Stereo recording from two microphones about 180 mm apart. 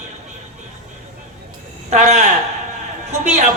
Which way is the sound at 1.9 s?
40° right (ahead or behind).